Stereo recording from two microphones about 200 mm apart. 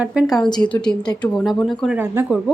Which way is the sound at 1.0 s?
20° left (ahead or behind).